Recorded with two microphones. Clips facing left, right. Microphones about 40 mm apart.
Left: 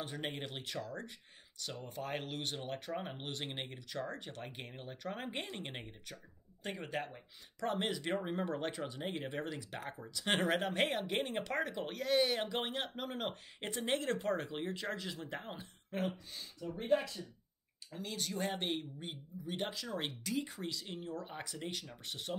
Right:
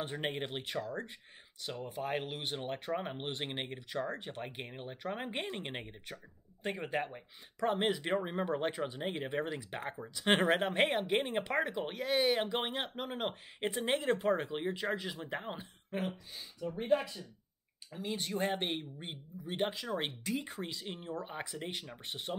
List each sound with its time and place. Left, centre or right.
0.0 s speech: right
1.6 s speech: centre
16.6 s speech: right
17.9 s speech: centre